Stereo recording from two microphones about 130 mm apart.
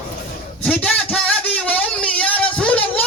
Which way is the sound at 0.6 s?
10° left (ahead or behind).